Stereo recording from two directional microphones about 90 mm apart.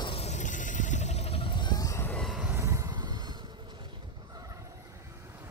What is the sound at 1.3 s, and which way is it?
Vehicle, 85° left.